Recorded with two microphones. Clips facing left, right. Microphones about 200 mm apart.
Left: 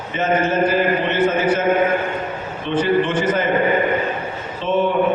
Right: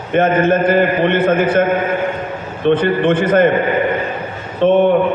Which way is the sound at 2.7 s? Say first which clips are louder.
Right 5 dB; 55° right (ahead or behind).